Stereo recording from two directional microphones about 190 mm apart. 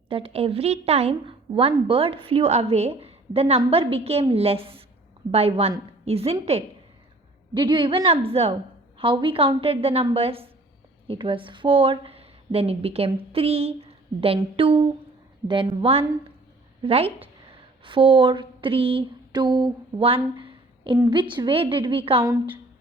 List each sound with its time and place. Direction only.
0.1 s a woman's voice: 30° right (ahead or behind)